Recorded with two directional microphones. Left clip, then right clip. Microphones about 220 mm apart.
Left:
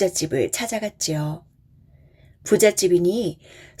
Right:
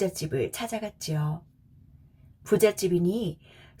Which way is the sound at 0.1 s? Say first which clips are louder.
Left 7 dB; 30° left (ahead or behind).